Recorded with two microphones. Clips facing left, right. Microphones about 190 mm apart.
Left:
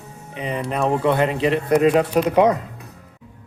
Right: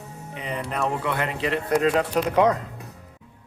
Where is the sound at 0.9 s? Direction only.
30° left (ahead or behind); by 2.5 s 15° left (ahead or behind).